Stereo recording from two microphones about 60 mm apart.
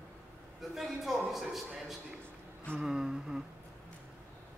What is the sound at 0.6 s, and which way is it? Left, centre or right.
A man's voice, centre.